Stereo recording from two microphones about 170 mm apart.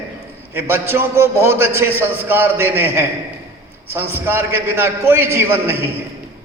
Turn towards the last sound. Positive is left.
turn(degrees=-15)  # may be behind; listen again after turning